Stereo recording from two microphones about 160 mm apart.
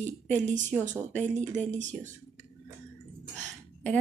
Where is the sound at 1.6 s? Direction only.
50° right (ahead or behind).